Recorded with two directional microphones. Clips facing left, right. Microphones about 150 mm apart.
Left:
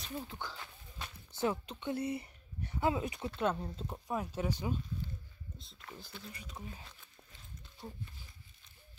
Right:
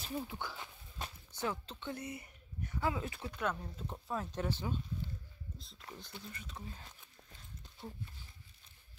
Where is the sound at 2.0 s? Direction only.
30° left (ahead or behind).